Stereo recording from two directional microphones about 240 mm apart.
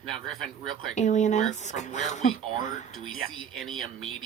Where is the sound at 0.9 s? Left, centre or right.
Left.